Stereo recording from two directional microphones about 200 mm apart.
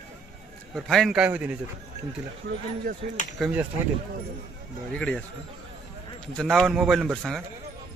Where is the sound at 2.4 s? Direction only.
45° right (ahead or behind).